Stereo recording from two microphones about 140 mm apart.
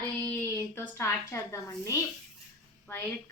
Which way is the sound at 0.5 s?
20° left (ahead or behind).